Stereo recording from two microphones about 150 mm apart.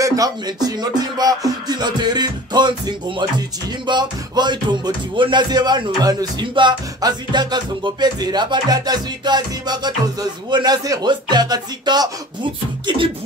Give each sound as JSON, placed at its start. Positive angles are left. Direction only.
{"t": 0.0, "sound": "rapping", "side_deg": -25}
{"t": 12.8, "sound": "beatboxing", "side_deg": -35}